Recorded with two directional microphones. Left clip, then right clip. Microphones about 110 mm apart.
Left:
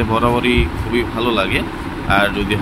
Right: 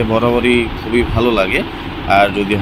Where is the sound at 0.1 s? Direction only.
10° right (ahead or behind).